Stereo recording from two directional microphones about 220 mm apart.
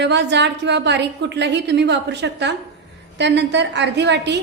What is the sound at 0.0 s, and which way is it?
A woman's voice, 50° right (ahead or behind).